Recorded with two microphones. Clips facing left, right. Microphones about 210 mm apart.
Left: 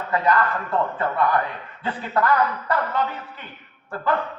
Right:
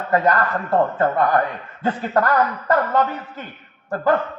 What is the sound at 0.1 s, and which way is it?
A man's voice, 45° right (ahead or behind).